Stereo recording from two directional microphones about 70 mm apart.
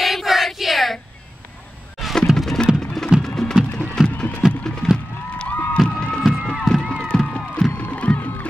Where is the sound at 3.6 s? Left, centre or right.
Centre.